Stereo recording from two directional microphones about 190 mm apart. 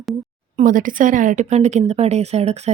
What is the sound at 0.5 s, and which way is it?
Speech, 45° right (ahead or behind).